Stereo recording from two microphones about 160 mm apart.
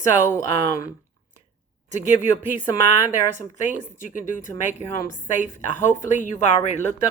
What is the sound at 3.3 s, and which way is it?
A woman's voice, 55° left (ahead or behind).